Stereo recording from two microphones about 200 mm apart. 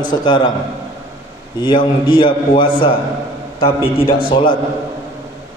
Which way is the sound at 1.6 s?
25° left (ahead or behind).